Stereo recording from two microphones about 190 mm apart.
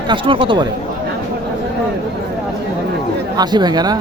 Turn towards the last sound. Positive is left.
turn(degrees=-20)  # may be behind; listen again after turning